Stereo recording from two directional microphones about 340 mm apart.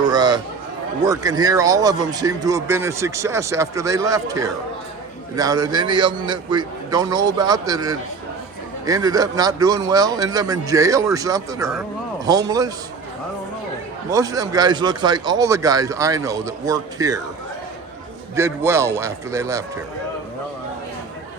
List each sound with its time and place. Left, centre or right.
0.0 s a sound: centre
1.0 s speech: centre
14.1 s speech: centre
18.3 s speech: centre